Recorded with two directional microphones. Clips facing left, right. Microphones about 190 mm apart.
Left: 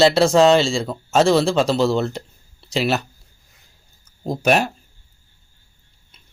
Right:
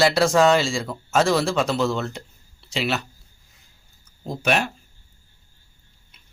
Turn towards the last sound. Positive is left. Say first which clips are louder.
# left 5 dB
turn(degrees=40)  # may be behind; listen again after turning